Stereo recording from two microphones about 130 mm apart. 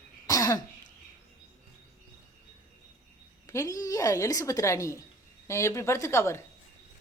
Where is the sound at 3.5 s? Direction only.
25° left (ahead or behind).